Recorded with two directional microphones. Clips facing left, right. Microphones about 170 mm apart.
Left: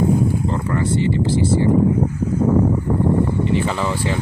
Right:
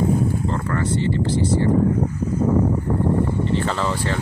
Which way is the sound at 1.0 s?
10° left (ahead or behind).